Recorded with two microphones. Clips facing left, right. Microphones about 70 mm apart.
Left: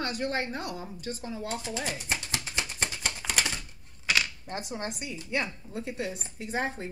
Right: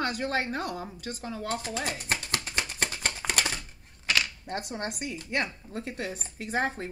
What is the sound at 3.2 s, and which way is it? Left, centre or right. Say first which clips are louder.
Typewriter: even; right.